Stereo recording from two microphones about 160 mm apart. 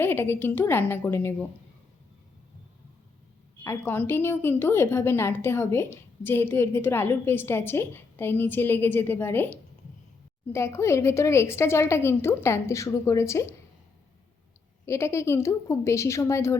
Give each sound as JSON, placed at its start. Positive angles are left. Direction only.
{"t": 0.0, "sound": "a woman's voice", "side_deg": 15}
{"t": 3.6, "sound": "a woman's voice", "side_deg": 15}
{"t": 14.8, "sound": "a woman's voice", "side_deg": 15}